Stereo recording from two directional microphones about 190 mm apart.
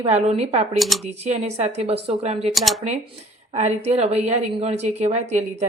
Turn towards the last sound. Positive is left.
turn(degrees=-35)  # may be behind; listen again after turning